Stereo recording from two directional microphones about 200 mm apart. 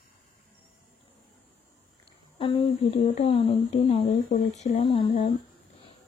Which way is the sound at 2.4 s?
25° left (ahead or behind).